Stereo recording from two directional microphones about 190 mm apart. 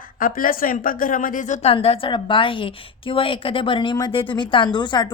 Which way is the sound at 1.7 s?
30° left (ahead or behind).